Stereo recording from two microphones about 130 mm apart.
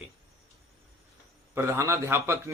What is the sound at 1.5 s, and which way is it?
Speech, 20° right (ahead or behind).